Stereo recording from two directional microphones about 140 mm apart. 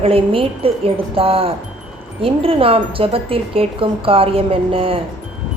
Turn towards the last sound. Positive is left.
turn(degrees=-40)  # may be behind; listen again after turning